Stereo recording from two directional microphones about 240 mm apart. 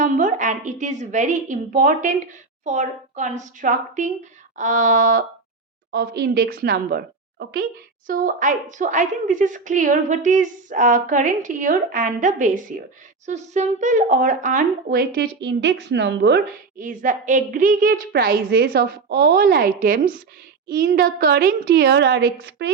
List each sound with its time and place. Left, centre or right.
0.0 s a woman's voice: right